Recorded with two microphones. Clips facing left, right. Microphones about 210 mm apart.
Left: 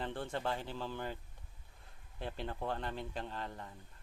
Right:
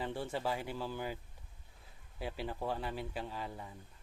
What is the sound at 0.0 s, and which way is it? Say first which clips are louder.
Speech: right 1 dB; 10° right (ahead or behind).